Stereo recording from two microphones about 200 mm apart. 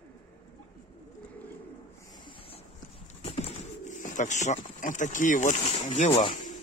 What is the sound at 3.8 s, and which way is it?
Speech, 40° left (ahead or behind).